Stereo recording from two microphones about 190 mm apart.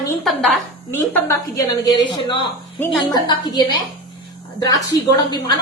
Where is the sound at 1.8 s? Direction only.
25° left (ahead or behind).